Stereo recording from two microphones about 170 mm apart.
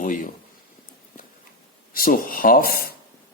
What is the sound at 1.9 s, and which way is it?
Speech, 55° left (ahead or behind).